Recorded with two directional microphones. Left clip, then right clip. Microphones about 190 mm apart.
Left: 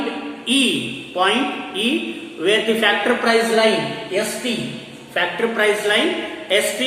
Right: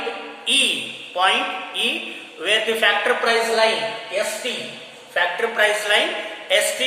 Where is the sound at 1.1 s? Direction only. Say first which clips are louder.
Even; 20° right (ahead or behind).